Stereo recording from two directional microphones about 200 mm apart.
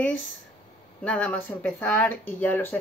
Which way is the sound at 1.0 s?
5° left (ahead or behind).